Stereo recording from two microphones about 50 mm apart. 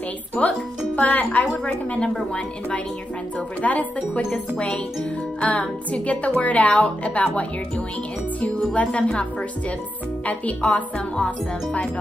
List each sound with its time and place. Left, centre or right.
0.4 s a woman's voice: left
0.9 s speech: left
3.6 s a woman's voice: left
5.4 s a woman's voice: left
8.7 s a woman's voice: left
10.2 s a woman's voice: left